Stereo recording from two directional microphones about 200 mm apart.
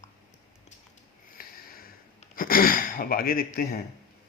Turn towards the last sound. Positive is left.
turn(degrees=50)  # may be behind; listen again after turning